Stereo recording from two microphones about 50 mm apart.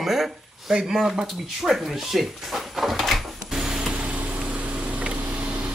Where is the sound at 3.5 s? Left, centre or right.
Centre.